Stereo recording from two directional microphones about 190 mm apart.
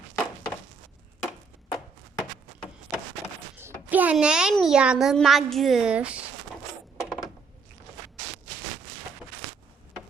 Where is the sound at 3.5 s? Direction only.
10° right (ahead or behind).